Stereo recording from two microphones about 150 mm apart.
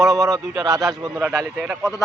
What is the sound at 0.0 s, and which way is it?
Speech, 20° right (ahead or behind).